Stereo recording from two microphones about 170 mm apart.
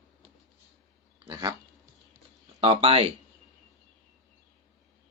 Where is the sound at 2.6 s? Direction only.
35° right (ahead or behind).